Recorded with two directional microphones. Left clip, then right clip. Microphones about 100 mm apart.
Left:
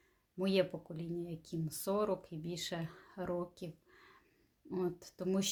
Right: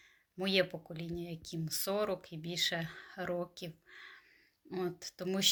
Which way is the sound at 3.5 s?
35° left (ahead or behind).